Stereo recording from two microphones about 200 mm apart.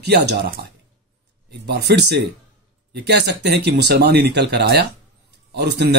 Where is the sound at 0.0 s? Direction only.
55° right (ahead or behind).